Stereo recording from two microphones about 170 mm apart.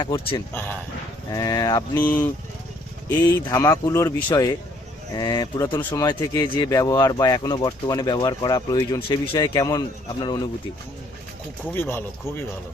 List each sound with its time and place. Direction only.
0.0 s speech: 25° left (ahead or behind)
2.0 s speech: 10° left (ahead or behind)
11.7 s speech: 15° left (ahead or behind)